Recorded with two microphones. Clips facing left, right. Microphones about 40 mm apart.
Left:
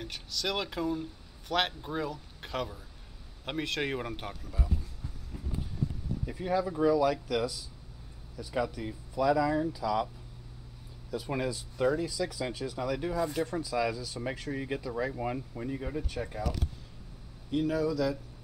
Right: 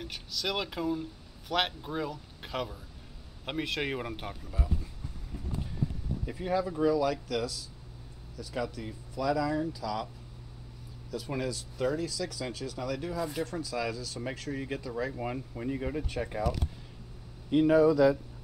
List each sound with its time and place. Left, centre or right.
0.0 s speech: centre
6.2 s speech: centre
11.1 s speech: centre
17.5 s speech: right